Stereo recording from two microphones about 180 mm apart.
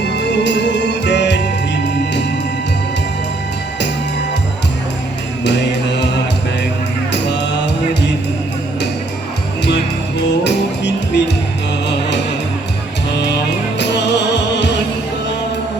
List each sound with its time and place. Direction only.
0.0 s music: 75° left (ahead or behind)
5.5 s music: 75° left (ahead or behind)
7.1 s music: 75° left (ahead or behind)
9.6 s music: 70° left (ahead or behind)
13.7 s music: 75° left (ahead or behind)